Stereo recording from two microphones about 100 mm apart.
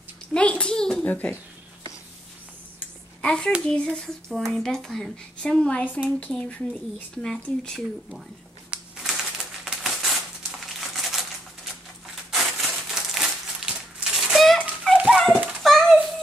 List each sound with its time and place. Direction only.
0.3 s speech: 10° left (ahead or behind)
3.2 s a child's voice: 10° left (ahead or behind)
8.6 s crumpling: 5° right (ahead or behind)
12.3 s crushing: centre (ahead or behind)
14.6 s a sound: centre (ahead or behind)